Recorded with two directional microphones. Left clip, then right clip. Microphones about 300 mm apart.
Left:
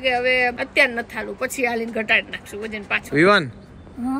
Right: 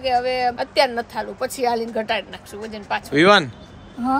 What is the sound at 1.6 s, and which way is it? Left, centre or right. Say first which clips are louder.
A woman's voice: right 2 dB; centre.